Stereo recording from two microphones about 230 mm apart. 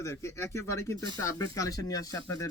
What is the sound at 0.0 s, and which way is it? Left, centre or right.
Speech, centre.